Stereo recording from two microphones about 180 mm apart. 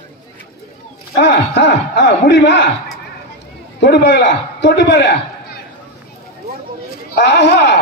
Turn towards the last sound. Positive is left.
turn(degrees=75)  # may be behind; listen again after turning